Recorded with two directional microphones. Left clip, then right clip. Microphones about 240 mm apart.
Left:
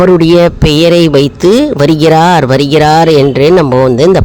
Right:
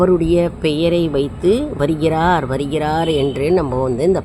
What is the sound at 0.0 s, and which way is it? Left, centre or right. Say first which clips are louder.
Speech: left 9 dB; left.